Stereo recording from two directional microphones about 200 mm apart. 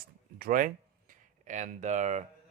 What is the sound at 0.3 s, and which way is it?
Speech, 45° right (ahead or behind).